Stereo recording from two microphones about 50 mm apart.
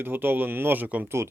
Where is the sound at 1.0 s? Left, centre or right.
Right.